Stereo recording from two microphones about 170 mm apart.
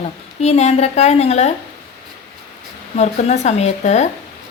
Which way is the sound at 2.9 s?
40° left (ahead or behind).